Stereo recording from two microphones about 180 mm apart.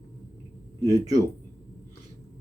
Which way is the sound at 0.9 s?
20° right (ahead or behind).